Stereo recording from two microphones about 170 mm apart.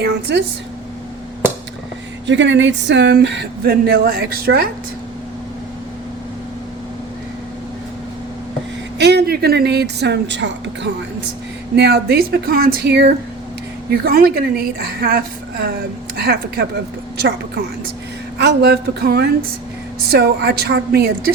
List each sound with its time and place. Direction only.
0.3 s a woman's voice: 90° right
2.2 s speech: 90° right; by 4.7 s 65° right (ahead or behind)
9.0 s speech: 75° right (ahead or behind)
11.8 s speech: 70° right (ahead or behind)
13.9 s a woman's voice: 65° right (ahead or behind)
18.3 s speech: 75° right (ahead or behind)